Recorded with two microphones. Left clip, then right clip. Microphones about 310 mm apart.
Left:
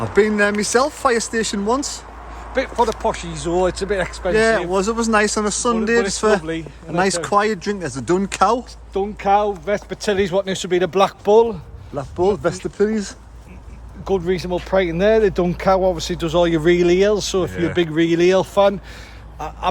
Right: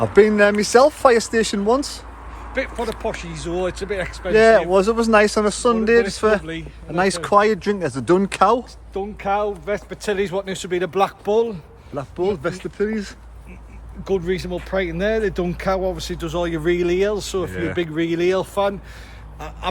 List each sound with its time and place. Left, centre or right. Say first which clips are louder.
0.0 s speech: right 3 dB; centre
2.5 s speech: left 6 dB; centre
4.3 s speech: right 4 dB; centre
6.4 s speech: left 5 dB; centre
6.9 s speech: right 1 dB; centre
8.9 s speech: left 6 dB; left
11.9 s speech: left 4 dB; centre; by 18.7 s left